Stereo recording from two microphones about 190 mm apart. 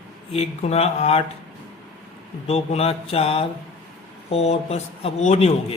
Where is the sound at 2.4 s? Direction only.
35° left (ahead or behind).